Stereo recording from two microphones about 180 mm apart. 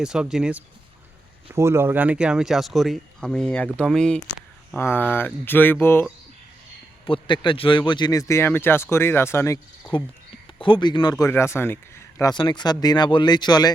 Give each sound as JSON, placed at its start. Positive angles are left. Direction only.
{"t": 0.0, "sound": "speech", "side_deg": -5}
{"t": 7.0, "sound": "speech", "side_deg": 30}
{"t": 10.6, "sound": "speech", "side_deg": 25}